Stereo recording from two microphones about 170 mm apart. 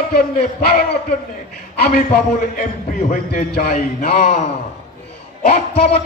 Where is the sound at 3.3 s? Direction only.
65° left (ahead or behind).